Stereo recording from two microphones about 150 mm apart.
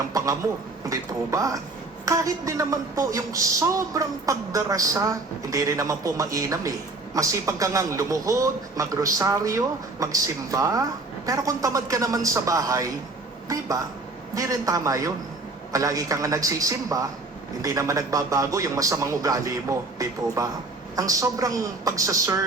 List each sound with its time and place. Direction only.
0.1 s speech: 25° right (ahead or behind)